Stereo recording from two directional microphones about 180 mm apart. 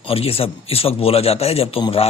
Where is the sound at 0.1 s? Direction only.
35° left (ahead or behind).